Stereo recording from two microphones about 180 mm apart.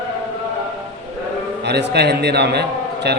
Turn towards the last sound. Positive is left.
turn(degrees=-65)  # may be behind; listen again after turning